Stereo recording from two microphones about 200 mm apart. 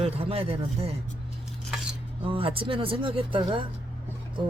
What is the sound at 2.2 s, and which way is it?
Speech, 25° right (ahead or behind).